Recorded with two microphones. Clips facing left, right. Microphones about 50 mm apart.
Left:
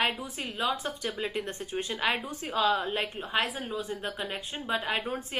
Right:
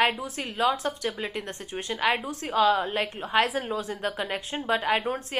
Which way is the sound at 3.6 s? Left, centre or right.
Right.